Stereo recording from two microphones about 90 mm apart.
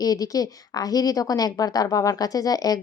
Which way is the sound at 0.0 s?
45° left (ahead or behind).